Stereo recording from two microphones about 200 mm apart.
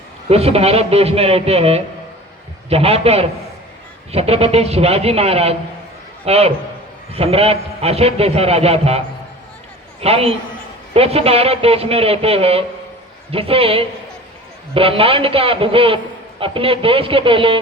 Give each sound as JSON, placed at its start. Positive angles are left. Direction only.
{"t": 0.3, "sound": "a man's voice", "side_deg": -30}